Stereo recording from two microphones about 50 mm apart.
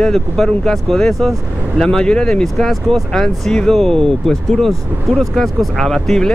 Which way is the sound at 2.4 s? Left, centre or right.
Centre.